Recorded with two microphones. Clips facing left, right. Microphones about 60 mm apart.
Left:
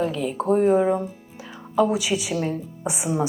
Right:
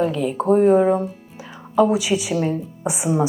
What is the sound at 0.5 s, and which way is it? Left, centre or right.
Speech, right.